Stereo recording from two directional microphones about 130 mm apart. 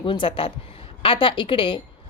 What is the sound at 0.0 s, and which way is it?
A woman's voice, 40° left (ahead or behind).